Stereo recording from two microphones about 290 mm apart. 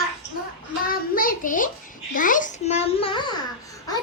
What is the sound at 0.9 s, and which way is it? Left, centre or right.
A child's voice, left.